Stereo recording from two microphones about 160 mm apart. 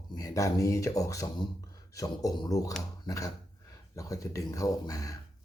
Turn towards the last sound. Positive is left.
turn(degrees=20)  # may be behind; listen again after turning